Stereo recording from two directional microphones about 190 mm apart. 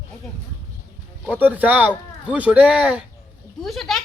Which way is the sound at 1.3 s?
10° right (ahead or behind).